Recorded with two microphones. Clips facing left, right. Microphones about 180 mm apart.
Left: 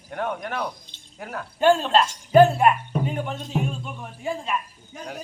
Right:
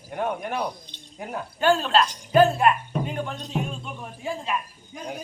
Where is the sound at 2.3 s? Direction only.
10° left (ahead or behind).